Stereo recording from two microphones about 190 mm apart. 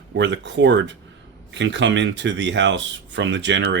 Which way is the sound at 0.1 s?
70° right (ahead or behind).